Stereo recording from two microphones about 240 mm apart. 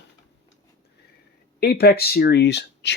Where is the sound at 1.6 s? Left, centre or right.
Left.